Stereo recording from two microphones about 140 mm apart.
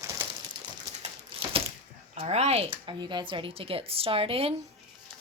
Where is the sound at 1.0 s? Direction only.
40° right (ahead or behind).